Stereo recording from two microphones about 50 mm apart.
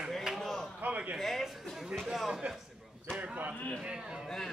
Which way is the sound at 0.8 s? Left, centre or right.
Right.